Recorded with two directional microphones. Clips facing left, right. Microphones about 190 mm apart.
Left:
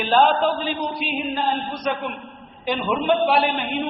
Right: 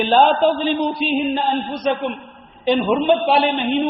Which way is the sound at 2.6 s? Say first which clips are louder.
Right 6 dB; 25° right (ahead or behind).